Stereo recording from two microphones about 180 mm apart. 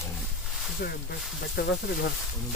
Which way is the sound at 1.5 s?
60° left (ahead or behind).